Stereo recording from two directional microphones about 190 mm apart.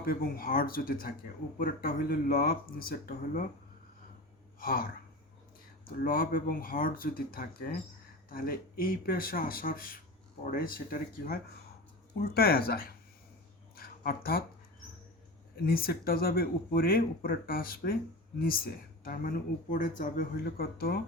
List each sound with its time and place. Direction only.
0.0 s speech: 50° left (ahead or behind)
4.6 s speech: 50° left (ahead or behind)
6.0 s speech: 50° left (ahead or behind)
13.7 s a sound: 50° left (ahead or behind)
15.6 s speech: 50° left (ahead or behind)